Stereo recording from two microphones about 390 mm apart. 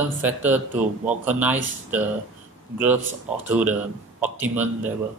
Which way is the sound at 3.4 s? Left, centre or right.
Centre.